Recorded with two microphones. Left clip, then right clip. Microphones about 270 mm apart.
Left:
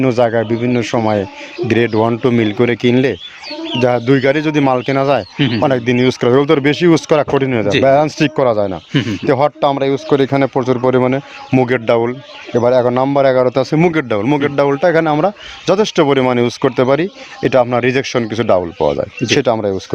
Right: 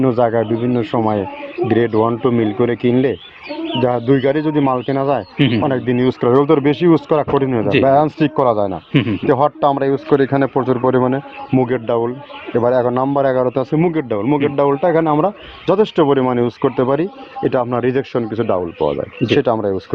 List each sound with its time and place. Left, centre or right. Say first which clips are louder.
0.0 s a man's voice: left 2 dB; left
8.9 s speech: even; centre
9.2 s a man's voice: left 1 dB; left